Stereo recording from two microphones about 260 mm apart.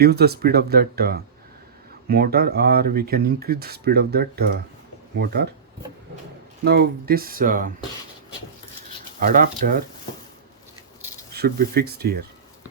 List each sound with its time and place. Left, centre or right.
0.0 s speech: right
6.7 s speech: right
9.2 s speech: right
11.3 s speech: right